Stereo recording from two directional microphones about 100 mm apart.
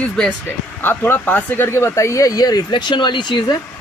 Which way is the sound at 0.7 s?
20° left (ahead or behind).